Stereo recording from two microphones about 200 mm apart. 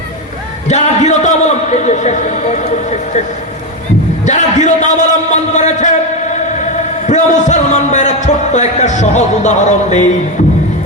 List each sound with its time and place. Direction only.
0.7 s speech: 35° left (ahead or behind)
4.3 s music: 35° left (ahead or behind)
7.1 s speech: 35° left (ahead or behind)